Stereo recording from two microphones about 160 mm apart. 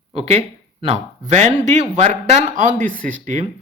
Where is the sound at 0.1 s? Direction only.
40° right (ahead or behind); by 3.4 s 55° right (ahead or behind).